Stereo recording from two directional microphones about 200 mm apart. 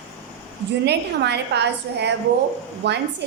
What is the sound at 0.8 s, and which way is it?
A woman's voice, 55° right (ahead or behind).